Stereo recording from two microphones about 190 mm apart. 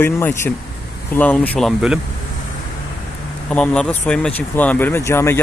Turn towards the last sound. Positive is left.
turn(degrees=10)  # may be behind; listen again after turning